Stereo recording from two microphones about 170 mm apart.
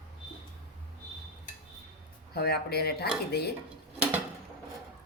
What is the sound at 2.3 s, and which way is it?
Speech, 65° left (ahead or behind).